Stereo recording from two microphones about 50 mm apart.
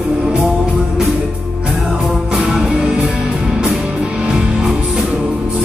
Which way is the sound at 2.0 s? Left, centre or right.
Centre.